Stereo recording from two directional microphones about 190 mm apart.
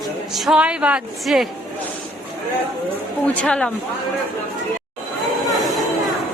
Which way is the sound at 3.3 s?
5° left (ahead or behind).